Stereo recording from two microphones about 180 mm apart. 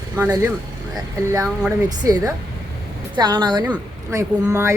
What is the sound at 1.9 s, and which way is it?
Speech, 20° right (ahead or behind).